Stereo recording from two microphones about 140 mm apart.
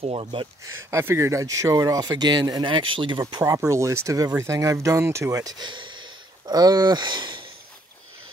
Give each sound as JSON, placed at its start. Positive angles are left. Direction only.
{"t": 0.0, "sound": "speech", "side_deg": -40}
{"t": 0.8, "sound": "speech", "side_deg": -20}